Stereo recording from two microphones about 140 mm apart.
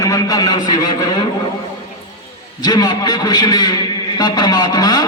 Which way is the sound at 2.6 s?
30° left (ahead or behind).